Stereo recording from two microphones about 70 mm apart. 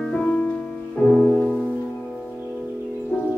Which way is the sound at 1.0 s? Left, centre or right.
Centre.